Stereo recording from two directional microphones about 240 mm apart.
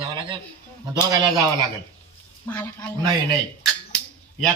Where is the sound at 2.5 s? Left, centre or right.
Centre.